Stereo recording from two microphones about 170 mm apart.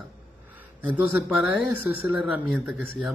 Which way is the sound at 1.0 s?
5° right (ahead or behind).